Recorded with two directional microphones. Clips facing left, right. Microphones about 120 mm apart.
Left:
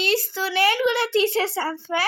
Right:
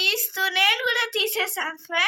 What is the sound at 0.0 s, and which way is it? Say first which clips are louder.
A child's voice: left 5 dB; 40° left (ahead or behind).